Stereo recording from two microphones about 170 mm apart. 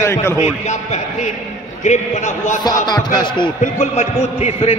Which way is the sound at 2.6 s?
20° left (ahead or behind).